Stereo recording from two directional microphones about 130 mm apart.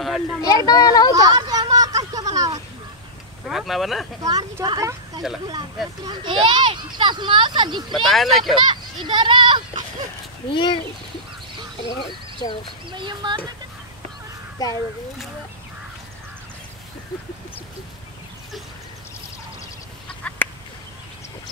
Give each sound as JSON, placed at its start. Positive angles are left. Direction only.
{"t": 0.0, "sound": "a sound", "side_deg": 0}
{"t": 0.7, "sound": "speech", "side_deg": 30}
{"t": 1.1, "sound": "a sound", "side_deg": -30}
{"t": 3.4, "sound": "speech", "side_deg": 0}
{"t": 4.2, "sound": "speech", "side_deg": -25}
{"t": 6.2, "sound": "speech", "side_deg": -40}
{"t": 7.9, "sound": "speech", "side_deg": 0}
{"t": 8.5, "sound": "speech", "side_deg": -35}
{"t": 10.5, "sound": "speech", "side_deg": 35}
{"t": 11.9, "sound": "speech", "side_deg": 35}
{"t": 12.9, "sound": "speech", "side_deg": -35}
{"t": 14.6, "sound": "speech", "side_deg": 30}
{"t": 20.2, "sound": "chicken", "side_deg": 10}